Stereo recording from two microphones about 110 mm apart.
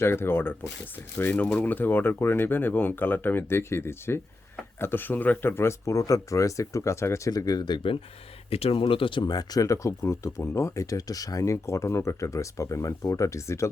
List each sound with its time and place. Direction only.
0.0 s speech: 20° left (ahead or behind); by 7.9 s 45° left (ahead or behind)
8.4 s speech: 65° left (ahead or behind); by 13.7 s 25° left (ahead or behind)